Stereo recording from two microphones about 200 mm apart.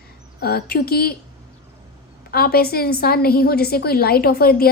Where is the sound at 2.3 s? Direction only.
50° left (ahead or behind).